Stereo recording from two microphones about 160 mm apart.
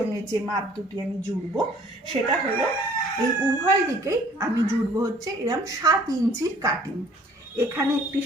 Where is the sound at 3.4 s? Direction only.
20° right (ahead or behind).